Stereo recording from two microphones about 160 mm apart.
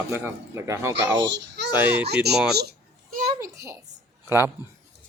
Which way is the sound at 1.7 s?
10° right (ahead or behind).